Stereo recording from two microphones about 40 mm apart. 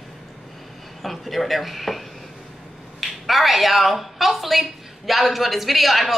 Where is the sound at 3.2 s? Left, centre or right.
Centre.